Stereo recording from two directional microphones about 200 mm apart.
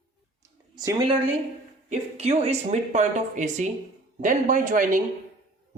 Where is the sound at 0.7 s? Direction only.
20° right (ahead or behind).